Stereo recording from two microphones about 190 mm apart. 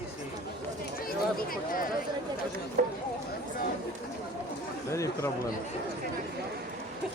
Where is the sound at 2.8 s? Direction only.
45° right (ahead or behind).